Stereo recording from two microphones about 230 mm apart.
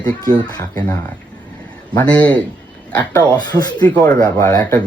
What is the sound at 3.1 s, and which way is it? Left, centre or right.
Speech, centre.